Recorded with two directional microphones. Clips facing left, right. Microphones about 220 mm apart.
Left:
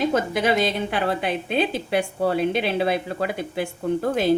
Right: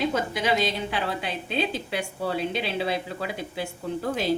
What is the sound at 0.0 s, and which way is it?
A woman's voice, 55° left (ahead or behind).